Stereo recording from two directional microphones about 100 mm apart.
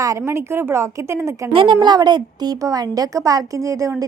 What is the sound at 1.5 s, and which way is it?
Speech, 60° right (ahead or behind).